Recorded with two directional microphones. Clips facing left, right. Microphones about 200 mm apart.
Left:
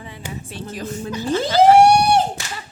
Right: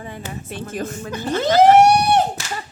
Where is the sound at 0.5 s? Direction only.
50° right (ahead or behind).